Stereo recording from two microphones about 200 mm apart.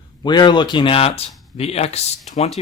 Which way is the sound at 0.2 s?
20° left (ahead or behind).